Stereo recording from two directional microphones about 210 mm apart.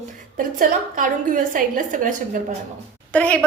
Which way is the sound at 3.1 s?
5° left (ahead or behind).